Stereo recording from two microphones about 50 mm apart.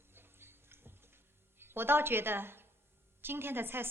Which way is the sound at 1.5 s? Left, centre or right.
Right.